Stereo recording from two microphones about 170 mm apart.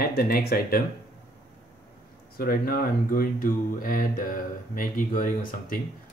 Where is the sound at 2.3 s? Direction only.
60° left (ahead or behind).